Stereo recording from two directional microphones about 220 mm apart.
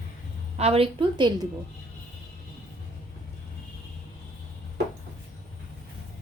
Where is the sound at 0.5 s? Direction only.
30° right (ahead or behind).